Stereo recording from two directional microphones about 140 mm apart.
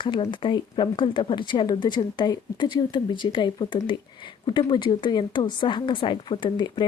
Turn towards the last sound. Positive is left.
turn(degrees=35)  # may be behind; listen again after turning